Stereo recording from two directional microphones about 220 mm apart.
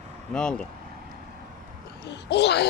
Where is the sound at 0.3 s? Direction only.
5° left (ahead or behind).